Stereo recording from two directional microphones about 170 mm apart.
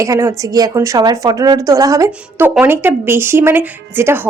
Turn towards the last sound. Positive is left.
turn(degrees=-15)  # may be behind; listen again after turning